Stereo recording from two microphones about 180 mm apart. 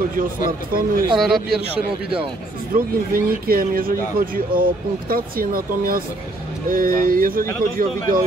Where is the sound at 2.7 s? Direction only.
55° right (ahead or behind).